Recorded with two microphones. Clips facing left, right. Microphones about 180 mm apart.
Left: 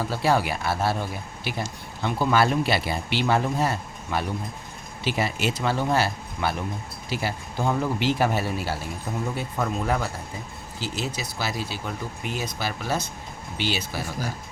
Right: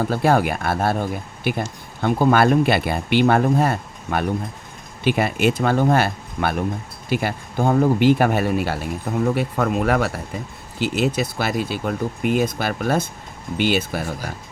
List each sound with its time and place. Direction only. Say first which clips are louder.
0.0 s speech: right 5 dB; 50° right (ahead or behind)